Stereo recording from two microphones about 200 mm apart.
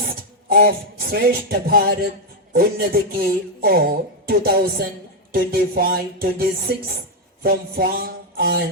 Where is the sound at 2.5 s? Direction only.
50° right (ahead or behind).